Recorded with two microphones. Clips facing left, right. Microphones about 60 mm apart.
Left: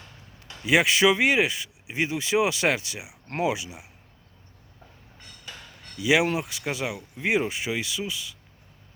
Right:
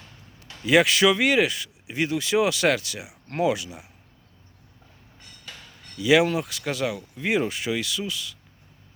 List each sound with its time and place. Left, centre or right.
0.6 s speech: centre
6.0 s speech: centre